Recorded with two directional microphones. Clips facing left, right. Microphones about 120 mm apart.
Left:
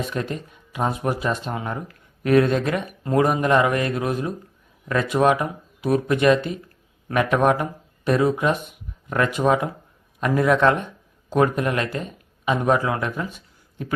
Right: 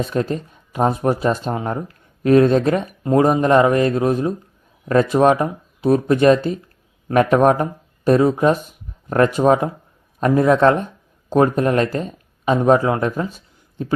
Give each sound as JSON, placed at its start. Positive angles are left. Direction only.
{"t": 0.0, "sound": "speech", "side_deg": -35}